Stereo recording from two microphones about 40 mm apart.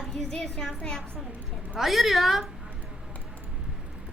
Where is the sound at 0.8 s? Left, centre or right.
Centre.